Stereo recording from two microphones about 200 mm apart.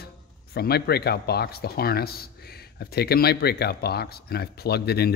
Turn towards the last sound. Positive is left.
turn(degrees=55)  # may be behind; listen again after turning